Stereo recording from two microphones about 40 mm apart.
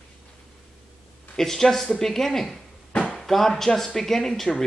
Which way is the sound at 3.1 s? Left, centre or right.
Centre.